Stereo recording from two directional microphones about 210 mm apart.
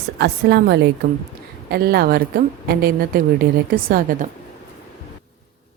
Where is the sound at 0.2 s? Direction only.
50° right (ahead or behind).